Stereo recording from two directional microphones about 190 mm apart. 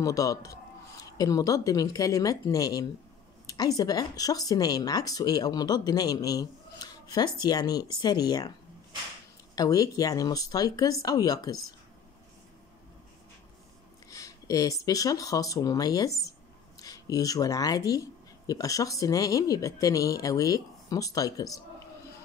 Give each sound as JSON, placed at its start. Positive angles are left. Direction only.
{"t": 0.0, "sound": "speech", "side_deg": 20}
{"t": 9.6, "sound": "speech", "side_deg": 20}
{"t": 14.1, "sound": "speech", "side_deg": 20}